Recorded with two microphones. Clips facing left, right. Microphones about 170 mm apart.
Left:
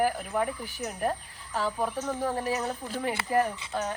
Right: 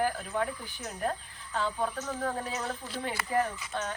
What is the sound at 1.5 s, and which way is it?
Speech, 10° left (ahead or behind).